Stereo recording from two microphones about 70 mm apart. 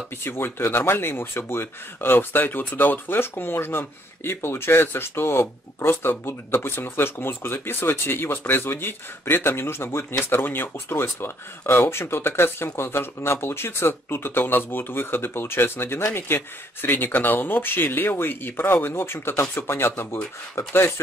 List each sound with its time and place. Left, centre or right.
0.2 s speech: left